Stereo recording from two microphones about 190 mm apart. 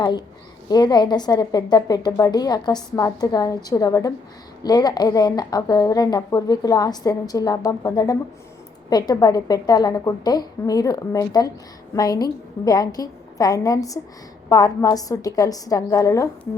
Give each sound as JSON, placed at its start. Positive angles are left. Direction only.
{"t": 0.7, "sound": "a woman's voice", "side_deg": 20}